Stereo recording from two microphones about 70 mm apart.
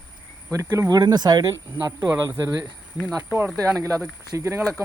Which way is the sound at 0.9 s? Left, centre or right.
Right.